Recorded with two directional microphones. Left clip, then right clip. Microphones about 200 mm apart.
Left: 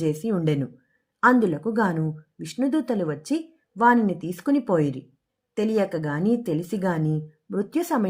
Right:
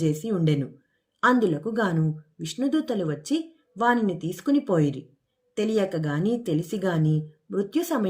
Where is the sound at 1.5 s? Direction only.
45° left (ahead or behind).